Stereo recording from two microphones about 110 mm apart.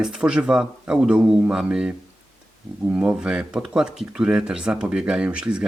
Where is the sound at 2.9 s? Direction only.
10° right (ahead or behind).